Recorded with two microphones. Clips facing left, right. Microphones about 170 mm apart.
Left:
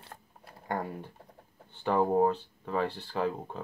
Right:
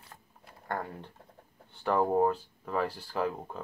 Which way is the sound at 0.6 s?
10° left (ahead or behind).